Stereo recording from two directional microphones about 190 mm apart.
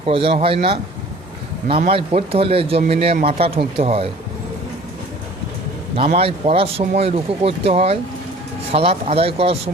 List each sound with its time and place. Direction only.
0.0 s speech: 30° right (ahead or behind)
1.9 s speech: 30° right (ahead or behind)
6.1 s speech: 30° right (ahead or behind)